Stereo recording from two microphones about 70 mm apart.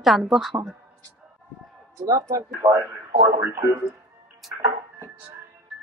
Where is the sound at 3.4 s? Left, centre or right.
Right.